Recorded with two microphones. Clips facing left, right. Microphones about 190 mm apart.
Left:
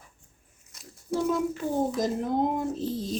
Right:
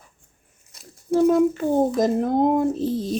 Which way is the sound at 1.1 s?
55° right (ahead or behind).